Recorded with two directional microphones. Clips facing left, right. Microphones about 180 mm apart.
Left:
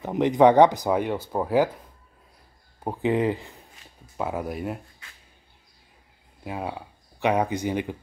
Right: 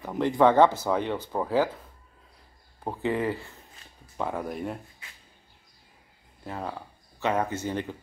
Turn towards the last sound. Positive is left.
turn(degrees=15)  # may be behind; listen again after turning